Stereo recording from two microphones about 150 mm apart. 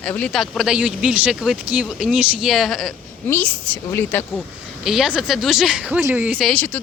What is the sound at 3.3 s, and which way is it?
A woman's voice, 15° left (ahead or behind).